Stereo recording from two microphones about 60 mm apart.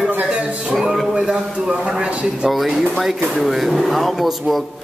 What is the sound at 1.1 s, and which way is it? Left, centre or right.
Speech, centre.